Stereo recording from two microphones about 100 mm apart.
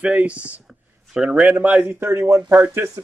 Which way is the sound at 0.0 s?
10° right (ahead or behind).